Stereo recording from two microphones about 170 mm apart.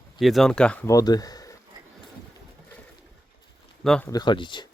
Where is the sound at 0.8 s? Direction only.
20° left (ahead or behind).